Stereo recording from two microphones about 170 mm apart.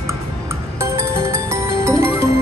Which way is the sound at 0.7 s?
15° right (ahead or behind).